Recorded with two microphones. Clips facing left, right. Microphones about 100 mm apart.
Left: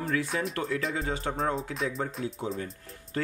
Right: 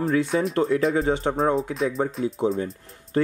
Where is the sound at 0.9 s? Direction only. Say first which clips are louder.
Right 9 dB; 30° right (ahead or behind).